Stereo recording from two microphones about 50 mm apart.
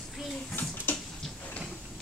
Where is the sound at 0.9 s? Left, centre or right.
Left.